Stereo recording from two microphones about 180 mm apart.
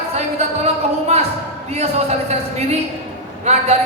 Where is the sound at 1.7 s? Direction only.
35° right (ahead or behind).